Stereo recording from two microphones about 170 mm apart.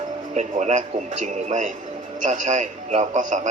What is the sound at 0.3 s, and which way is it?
A man's voice, 45° right (ahead or behind).